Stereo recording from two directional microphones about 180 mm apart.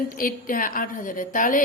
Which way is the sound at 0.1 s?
50° left (ahead or behind).